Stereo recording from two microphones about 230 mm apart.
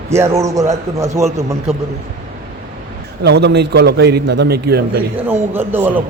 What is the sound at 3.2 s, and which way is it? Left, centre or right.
A man's voice, right.